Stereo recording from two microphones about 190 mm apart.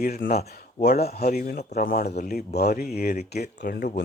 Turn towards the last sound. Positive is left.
turn(degrees=50)  # may be behind; listen again after turning